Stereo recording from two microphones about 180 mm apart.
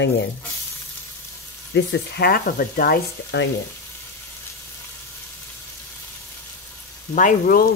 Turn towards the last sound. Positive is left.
turn(degrees=50)  # may be behind; listen again after turning